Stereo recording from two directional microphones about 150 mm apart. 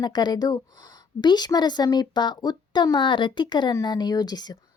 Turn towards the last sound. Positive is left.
turn(degrees=25)  # may be behind; listen again after turning